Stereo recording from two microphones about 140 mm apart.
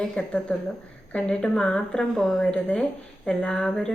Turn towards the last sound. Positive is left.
turn(degrees=5)  # may be behind; listen again after turning